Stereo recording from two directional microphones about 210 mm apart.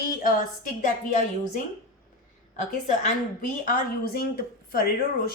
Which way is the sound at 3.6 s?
45° left (ahead or behind).